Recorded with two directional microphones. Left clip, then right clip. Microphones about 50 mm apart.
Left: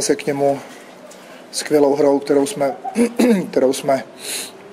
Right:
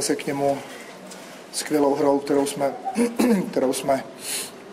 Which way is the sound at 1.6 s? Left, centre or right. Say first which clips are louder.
Left 6 dB; centre.